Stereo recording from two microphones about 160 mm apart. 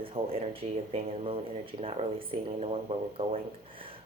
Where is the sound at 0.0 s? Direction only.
35° right (ahead or behind).